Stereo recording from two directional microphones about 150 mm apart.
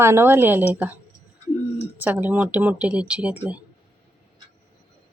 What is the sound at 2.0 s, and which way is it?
Speech, 10° right (ahead or behind).